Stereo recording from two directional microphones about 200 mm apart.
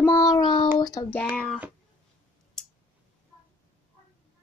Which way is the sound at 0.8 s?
15° left (ahead or behind).